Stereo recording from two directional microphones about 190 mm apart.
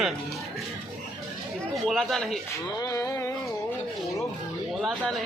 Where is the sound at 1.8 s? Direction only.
Centre (ahead or behind).